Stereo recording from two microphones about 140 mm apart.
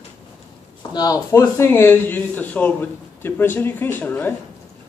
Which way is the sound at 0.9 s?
25° left (ahead or behind).